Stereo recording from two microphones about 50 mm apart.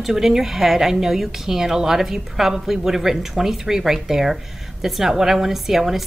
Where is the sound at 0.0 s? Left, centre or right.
Centre.